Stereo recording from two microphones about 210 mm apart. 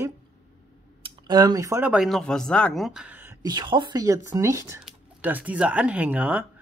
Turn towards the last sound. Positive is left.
turn(degrees=-5)  # may be behind; listen again after turning